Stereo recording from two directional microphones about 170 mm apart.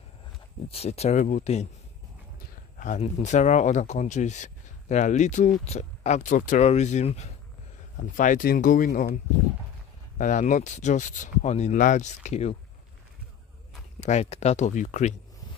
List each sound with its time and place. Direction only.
0.7 s speech: 35° left (ahead or behind)
2.8 s speech: 45° left (ahead or behind)
10.1 s speech: 50° left (ahead or behind)
14.0 s speech: 40° left (ahead or behind)